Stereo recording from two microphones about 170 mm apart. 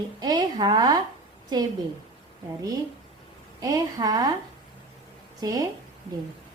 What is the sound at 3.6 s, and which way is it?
Speech, 20° right (ahead or behind).